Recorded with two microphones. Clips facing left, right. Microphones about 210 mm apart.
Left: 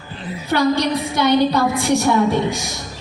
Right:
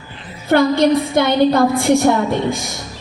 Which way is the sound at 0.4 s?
55° right (ahead or behind).